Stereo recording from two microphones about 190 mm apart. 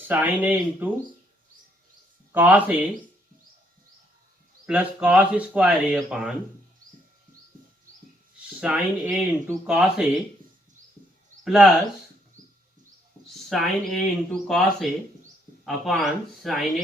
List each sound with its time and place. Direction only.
0.1 s speech: 10° right (ahead or behind)
2.3 s speech: 10° right (ahead or behind)
4.6 s speech: 5° right (ahead or behind)
8.6 s speech: 5° right (ahead or behind)
11.4 s speech: centre (ahead or behind)
12.4 s bird: 45° right (ahead or behind)
13.5 s speech: centre (ahead or behind)